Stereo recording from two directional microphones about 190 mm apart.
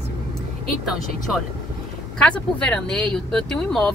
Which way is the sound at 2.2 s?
5° left (ahead or behind).